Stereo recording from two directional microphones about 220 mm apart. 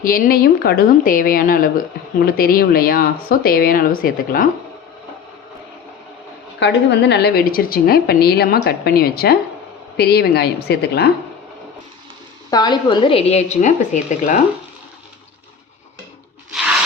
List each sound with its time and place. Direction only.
0.0 s speech: 40° left (ahead or behind)
6.6 s a woman's voice: 50° left (ahead or behind)
12.5 s a woman's voice: 20° left (ahead or behind); by 14.3 s 35° left (ahead or behind)